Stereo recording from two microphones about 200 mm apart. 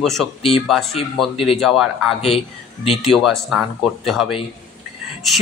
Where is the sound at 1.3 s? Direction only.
30° left (ahead or behind).